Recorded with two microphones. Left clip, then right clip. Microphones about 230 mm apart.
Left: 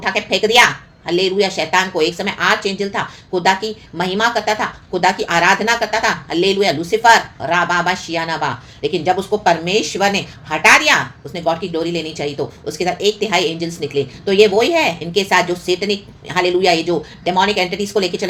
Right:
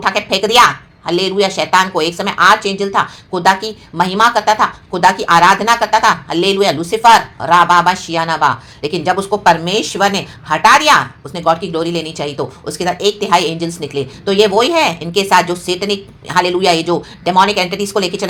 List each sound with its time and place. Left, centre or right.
0.0 s speech: right